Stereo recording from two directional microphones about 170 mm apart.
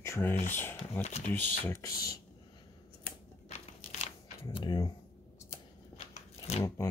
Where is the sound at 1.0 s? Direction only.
40° left (ahead or behind).